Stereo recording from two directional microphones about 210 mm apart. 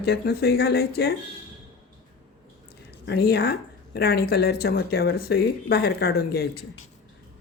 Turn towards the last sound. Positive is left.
turn(degrees=50)  # may be behind; listen again after turning